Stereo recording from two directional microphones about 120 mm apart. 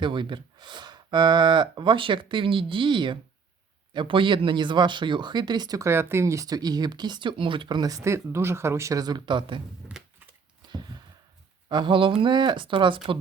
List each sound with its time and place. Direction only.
0.0 s speech: 40° right (ahead or behind)
10.7 s a sound: 40° right (ahead or behind)
11.7 s speech: 40° right (ahead or behind)